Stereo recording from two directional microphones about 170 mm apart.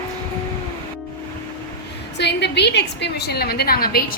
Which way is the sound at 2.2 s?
85° left.